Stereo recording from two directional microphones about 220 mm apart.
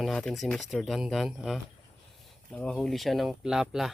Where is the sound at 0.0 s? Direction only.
Centre (ahead or behind).